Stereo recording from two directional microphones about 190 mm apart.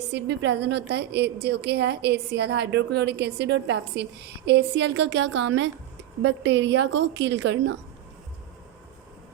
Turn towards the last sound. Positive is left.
turn(degrees=-70)  # may be behind; listen again after turning